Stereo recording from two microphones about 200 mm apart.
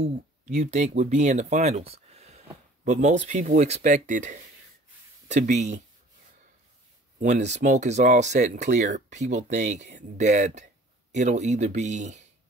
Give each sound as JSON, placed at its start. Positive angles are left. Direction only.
{"t": 0.0, "sound": "speech", "side_deg": -35}
{"t": 7.2, "sound": "speech", "side_deg": -35}